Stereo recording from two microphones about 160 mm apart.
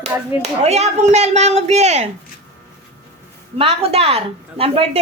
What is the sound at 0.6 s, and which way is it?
A woman's voice, 45° right (ahead or behind).